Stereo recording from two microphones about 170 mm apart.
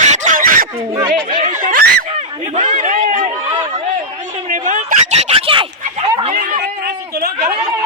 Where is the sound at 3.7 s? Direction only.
45° right (ahead or behind).